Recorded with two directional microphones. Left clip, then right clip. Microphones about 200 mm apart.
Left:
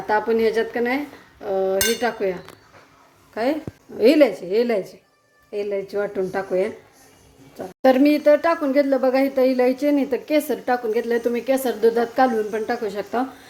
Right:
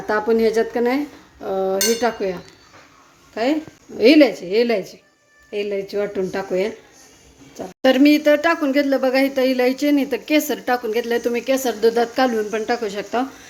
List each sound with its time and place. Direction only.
0.1 s dishes: 15° right (ahead or behind)
3.9 s dishes: 5° right (ahead or behind)
7.8 s speech: centre (ahead or behind)